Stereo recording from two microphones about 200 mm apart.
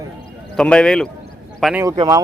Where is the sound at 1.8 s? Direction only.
20° right (ahead or behind).